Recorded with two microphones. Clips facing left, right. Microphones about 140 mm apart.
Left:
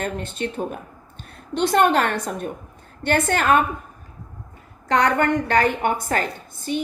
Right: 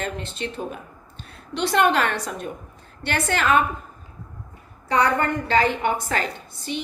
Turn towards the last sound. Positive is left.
turn(degrees=45)  # may be behind; listen again after turning